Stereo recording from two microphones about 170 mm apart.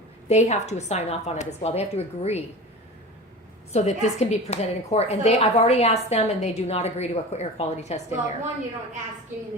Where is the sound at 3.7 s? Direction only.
40° left (ahead or behind).